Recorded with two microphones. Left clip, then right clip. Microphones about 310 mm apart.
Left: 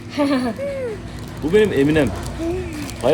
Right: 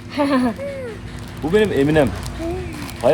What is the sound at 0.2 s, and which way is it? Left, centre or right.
Speech, right.